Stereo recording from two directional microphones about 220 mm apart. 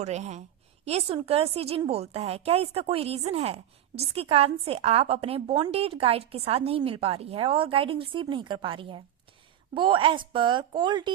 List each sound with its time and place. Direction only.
0.0 s a woman's voice: 30° right (ahead or behind)